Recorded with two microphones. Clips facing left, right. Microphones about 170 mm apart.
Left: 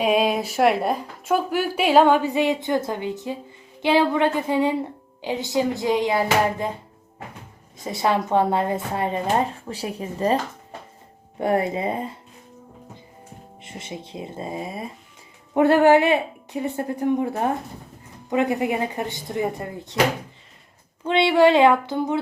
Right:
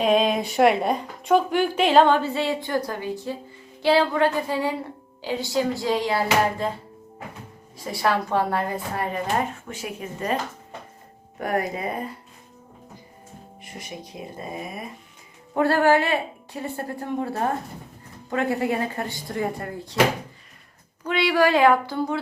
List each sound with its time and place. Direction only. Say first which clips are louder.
0.0 s a woman's voice: even; 10° left (ahead or behind)
7.8 s speech: left 1 dB; 20° left (ahead or behind)
11.3 s speech: left 4 dB; 25° left (ahead or behind)
13.6 s speech: left 3 dB; 25° left (ahead or behind)
21.0 s speech: left 4 dB; 25° left (ahead or behind)